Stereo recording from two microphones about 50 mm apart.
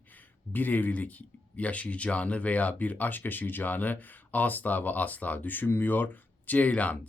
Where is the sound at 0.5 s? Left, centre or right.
Left.